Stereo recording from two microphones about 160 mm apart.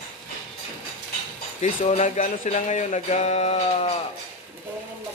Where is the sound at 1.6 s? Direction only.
45° left (ahead or behind).